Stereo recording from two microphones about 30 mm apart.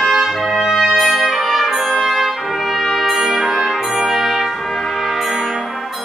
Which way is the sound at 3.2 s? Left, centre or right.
Centre.